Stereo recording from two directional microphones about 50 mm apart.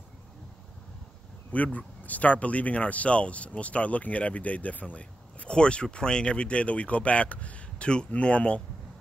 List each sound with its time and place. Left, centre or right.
1.5 s speech: left